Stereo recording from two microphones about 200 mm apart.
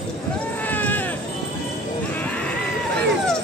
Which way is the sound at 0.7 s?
10° left (ahead or behind).